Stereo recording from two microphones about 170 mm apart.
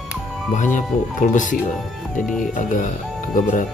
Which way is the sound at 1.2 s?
50° left (ahead or behind).